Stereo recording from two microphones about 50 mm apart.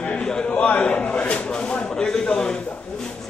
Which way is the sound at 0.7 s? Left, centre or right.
Left.